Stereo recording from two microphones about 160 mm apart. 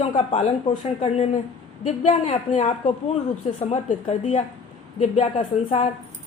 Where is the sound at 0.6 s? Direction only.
35° left (ahead or behind).